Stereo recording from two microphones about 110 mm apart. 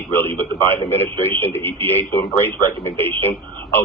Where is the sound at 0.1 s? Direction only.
20° left (ahead or behind).